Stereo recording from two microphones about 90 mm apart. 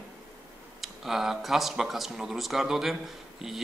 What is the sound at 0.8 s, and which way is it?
Speech, 5° right (ahead or behind).